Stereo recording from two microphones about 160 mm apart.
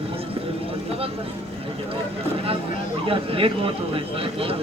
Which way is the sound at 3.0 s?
35° right (ahead or behind).